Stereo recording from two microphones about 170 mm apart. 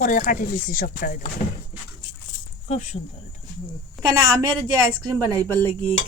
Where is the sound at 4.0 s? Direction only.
25° right (ahead or behind).